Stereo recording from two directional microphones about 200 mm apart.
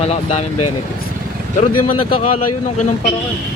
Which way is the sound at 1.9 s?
30° left (ahead or behind).